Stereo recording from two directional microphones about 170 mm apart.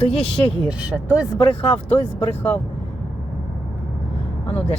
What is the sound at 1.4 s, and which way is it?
Speech, 30° left (ahead or behind).